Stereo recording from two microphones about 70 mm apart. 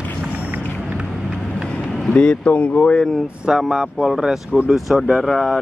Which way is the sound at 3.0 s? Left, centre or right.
Centre.